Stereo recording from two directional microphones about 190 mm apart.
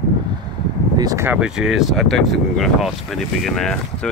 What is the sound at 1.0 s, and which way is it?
Speech, 15° right (ahead or behind).